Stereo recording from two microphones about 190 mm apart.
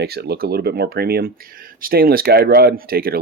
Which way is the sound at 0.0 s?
55° right (ahead or behind).